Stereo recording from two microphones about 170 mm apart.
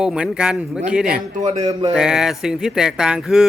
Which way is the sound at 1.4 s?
45° right (ahead or behind).